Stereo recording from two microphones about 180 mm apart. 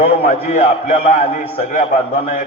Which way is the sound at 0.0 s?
40° left (ahead or behind).